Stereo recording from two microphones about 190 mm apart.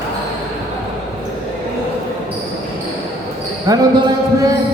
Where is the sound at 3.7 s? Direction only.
20° right (ahead or behind).